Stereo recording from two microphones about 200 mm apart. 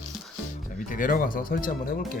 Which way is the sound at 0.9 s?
45° left (ahead or behind).